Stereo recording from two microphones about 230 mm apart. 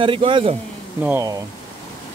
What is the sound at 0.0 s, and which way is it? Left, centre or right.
Speech, right.